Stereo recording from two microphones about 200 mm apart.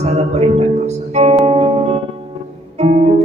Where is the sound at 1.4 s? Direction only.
30° right (ahead or behind).